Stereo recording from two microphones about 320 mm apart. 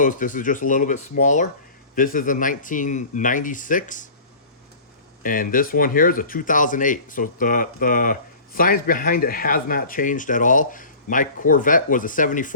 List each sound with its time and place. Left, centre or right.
0.0 s speech: left
5.2 s speech: left